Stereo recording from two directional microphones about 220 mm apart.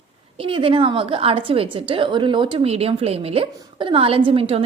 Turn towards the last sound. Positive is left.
turn(degrees=-25)  # may be behind; listen again after turning